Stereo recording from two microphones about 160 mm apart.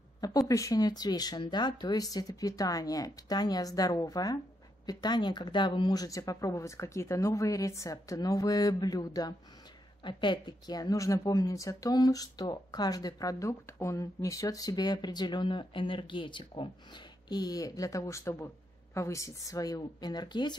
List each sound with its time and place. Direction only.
0.2 s a woman's voice: 20° left (ahead or behind)